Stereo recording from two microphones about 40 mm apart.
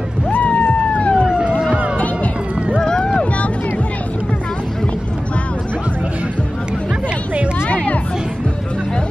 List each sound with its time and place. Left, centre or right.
0.3 s music: left
1.2 s police car: right
2.8 s a sound: centre
7.7 s music: left